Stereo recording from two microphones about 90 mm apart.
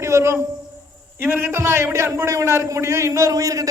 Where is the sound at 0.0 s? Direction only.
30° right (ahead or behind).